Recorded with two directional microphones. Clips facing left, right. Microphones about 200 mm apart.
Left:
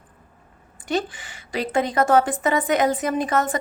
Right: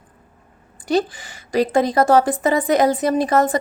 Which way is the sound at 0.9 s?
35° right (ahead or behind).